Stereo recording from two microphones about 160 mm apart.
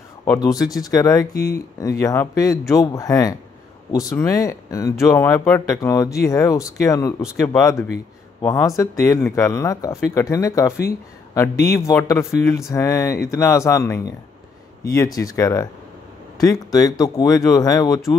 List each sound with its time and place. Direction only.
0.2 s speech: 20° left (ahead or behind)